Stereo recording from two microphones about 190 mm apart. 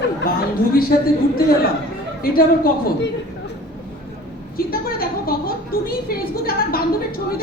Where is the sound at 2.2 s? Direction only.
50° left (ahead or behind).